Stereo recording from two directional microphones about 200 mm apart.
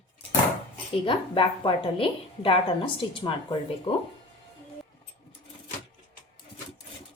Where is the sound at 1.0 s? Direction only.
25° left (ahead or behind).